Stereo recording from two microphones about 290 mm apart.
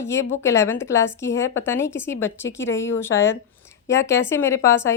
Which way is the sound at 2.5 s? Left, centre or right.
Left.